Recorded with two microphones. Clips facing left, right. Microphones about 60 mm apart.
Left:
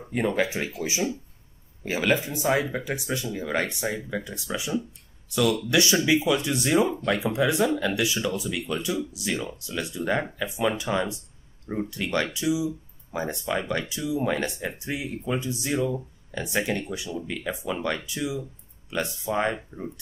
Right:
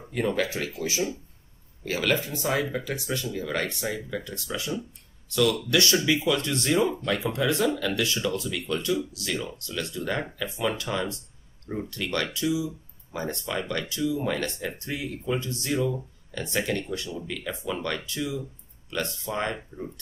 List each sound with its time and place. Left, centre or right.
0.1 s speech: centre